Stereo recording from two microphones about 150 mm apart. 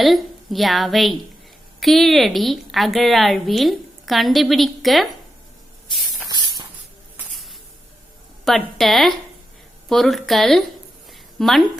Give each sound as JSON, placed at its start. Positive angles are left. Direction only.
{"t": 0.0, "sound": "a woman's voice", "side_deg": 0}
{"t": 6.2, "sound": "a sound", "side_deg": -30}
{"t": 8.4, "sound": "a woman's voice", "side_deg": 0}